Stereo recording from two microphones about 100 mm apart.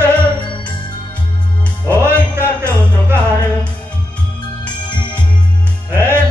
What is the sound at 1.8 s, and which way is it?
Music, 25° right (ahead or behind).